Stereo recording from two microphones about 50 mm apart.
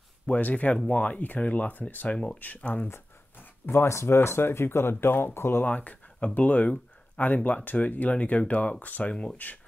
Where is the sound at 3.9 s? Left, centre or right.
Left.